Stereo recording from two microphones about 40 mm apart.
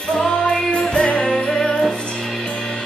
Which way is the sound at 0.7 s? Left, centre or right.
Left.